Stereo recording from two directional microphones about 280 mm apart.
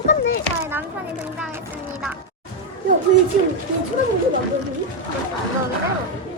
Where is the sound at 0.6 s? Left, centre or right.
Centre.